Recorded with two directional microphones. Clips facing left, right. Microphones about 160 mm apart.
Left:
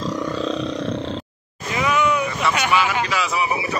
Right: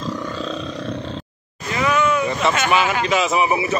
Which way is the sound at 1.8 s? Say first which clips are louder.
Right 1 dB; 15° left (ahead or behind).